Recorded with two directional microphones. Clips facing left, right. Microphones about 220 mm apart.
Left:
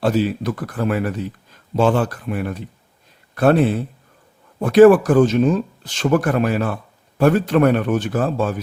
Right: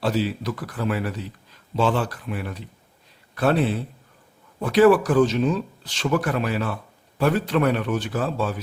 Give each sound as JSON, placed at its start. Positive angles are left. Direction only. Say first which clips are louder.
{"t": 0.0, "sound": "speech", "louder": "left 5 dB", "side_deg": 50}